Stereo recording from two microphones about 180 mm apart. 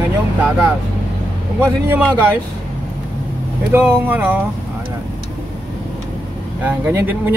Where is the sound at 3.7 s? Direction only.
10° right (ahead or behind).